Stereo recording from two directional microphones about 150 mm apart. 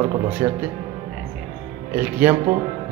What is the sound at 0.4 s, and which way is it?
Speech, 20° right (ahead or behind).